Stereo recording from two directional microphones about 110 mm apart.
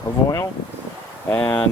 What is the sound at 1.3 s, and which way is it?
Speech, 10° left (ahead or behind).